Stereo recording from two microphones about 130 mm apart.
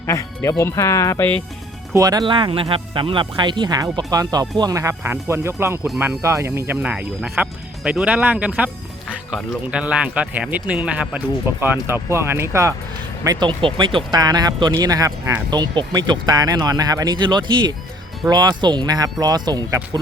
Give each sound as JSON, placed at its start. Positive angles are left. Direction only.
{"t": 0.1, "sound": "speech", "side_deg": 25}
{"t": 1.9, "sound": "speech", "side_deg": -25}
{"t": 6.8, "sound": "speech", "side_deg": -10}
{"t": 9.7, "sound": "speech", "side_deg": -10}
{"t": 13.2, "sound": "speech", "side_deg": -35}